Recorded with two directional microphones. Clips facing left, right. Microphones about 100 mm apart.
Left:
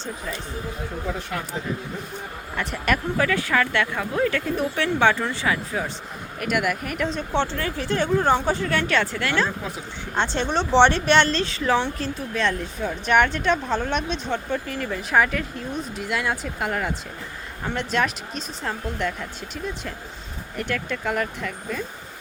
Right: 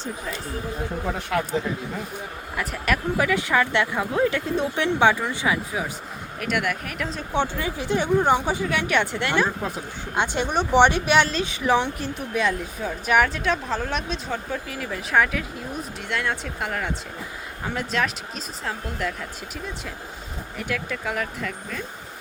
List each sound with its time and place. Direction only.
1.3 s speech: 90° right
2.6 s speech: centre (ahead or behind)
3.2 s speech: 15° right (ahead or behind)
6.4 s speech: centre (ahead or behind)